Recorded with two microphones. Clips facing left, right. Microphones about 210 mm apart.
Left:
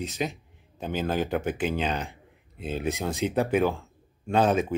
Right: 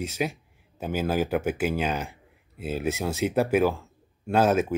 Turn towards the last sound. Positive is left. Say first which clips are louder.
# right 1 dB
turn(degrees=-5)  # may be behind; listen again after turning